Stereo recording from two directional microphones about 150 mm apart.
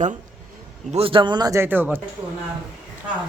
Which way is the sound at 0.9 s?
35° right (ahead or behind).